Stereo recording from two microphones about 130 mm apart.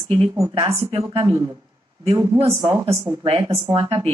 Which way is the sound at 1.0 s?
25° right (ahead or behind).